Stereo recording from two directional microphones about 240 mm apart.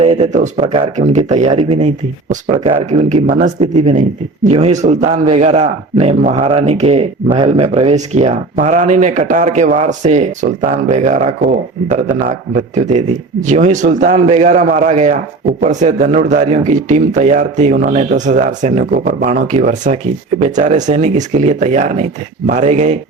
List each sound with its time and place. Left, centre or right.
0.0 s a man's voice: right